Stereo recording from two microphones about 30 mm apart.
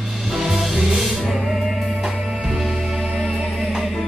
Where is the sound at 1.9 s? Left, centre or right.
Centre.